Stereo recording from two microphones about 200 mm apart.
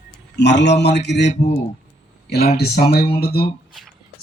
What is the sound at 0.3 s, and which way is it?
Speech, 60° left (ahead or behind).